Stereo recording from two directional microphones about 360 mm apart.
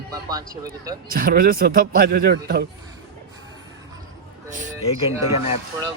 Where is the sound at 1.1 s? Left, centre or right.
Right.